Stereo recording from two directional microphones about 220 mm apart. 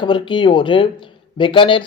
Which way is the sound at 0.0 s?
20° left (ahead or behind).